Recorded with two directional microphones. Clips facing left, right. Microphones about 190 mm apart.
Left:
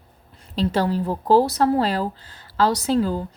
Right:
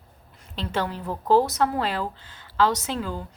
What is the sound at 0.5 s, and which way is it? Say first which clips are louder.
Speech: left 7 dB; 35° left (ahead or behind).